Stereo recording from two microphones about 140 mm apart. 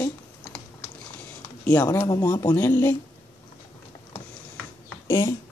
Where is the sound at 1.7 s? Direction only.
15° left (ahead or behind).